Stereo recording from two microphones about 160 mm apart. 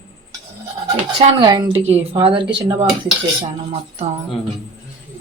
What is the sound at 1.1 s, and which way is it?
Speech, 30° right (ahead or behind).